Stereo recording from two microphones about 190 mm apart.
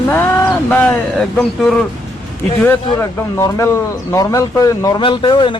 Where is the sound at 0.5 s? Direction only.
10° left (ahead or behind).